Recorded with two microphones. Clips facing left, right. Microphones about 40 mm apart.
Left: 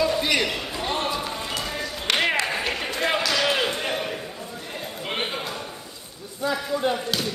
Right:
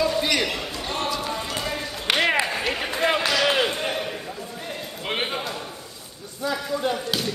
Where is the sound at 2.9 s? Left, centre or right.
Centre.